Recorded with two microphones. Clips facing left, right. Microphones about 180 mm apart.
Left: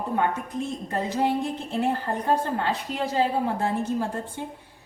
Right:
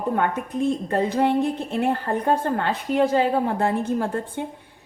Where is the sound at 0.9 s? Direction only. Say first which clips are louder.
Right 1 dB; 60° right (ahead or behind).